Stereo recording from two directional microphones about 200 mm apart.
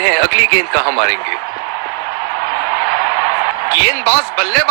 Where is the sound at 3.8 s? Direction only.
50° right (ahead or behind).